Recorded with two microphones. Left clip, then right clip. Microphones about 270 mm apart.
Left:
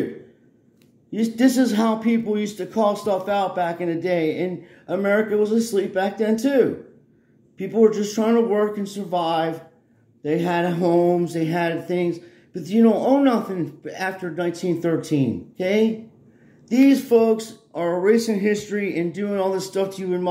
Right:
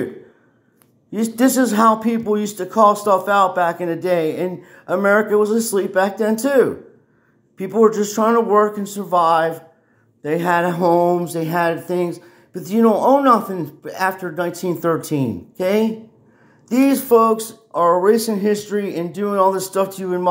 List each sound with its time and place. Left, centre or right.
1.1 s speech: centre